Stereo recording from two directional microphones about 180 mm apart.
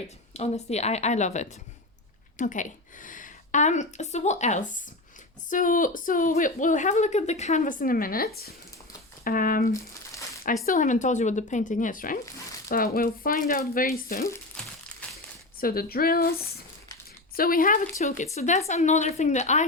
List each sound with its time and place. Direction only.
0.3 s a woman's voice: 35° left (ahead or behind); by 14.3 s 50° left (ahead or behind)
15.0 s crumpling: 5° left (ahead or behind)
15.6 s speech: 55° left (ahead or behind)
17.3 s a woman's voice: 55° left (ahead or behind)